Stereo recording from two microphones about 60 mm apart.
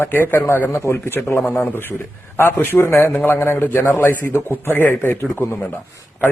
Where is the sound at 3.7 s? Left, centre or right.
Left.